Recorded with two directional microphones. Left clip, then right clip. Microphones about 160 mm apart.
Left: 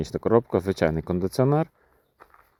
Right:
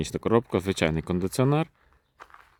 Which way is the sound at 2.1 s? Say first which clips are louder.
Right 4 dB; 30° left (ahead or behind).